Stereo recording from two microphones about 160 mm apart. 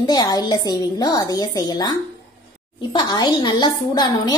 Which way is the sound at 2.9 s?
25° left (ahead or behind).